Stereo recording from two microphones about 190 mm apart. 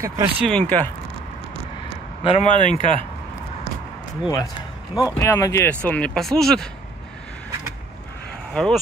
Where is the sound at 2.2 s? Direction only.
35° left (ahead or behind).